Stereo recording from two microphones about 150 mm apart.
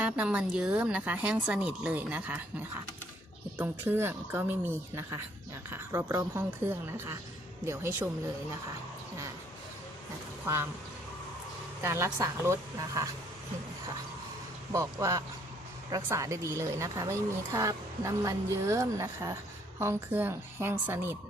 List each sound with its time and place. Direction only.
0.0 s speech: 10° right (ahead or behind)
10.4 s speech: 15° right (ahead or behind)
11.8 s a woman's voice: 20° right (ahead or behind)
14.7 s a woman's voice: 20° right (ahead or behind)